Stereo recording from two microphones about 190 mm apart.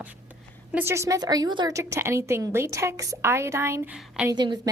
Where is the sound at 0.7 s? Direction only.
10° right (ahead or behind).